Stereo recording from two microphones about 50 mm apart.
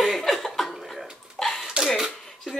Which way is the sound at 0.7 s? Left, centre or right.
Centre.